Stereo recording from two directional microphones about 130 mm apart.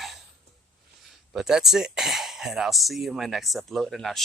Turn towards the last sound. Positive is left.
turn(degrees=0)  # may be behind; listen again after turning